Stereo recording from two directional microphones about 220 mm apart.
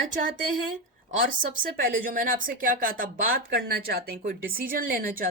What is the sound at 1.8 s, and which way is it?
Speech, 40° right (ahead or behind).